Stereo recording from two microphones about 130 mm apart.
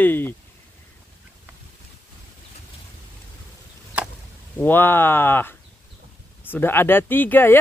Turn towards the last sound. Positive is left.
turn(degrees=15)  # may be behind; listen again after turning